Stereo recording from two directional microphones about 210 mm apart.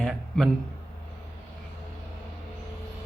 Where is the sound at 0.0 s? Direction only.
Centre (ahead or behind).